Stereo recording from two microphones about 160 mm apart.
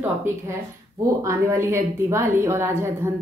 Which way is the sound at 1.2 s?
15° right (ahead or behind).